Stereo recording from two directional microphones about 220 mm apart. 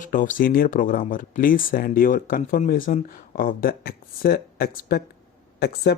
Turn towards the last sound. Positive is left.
turn(degrees=50)  # may be behind; listen again after turning